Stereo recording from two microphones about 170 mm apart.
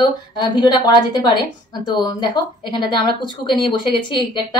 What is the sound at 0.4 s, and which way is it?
Speech, 25° left (ahead or behind).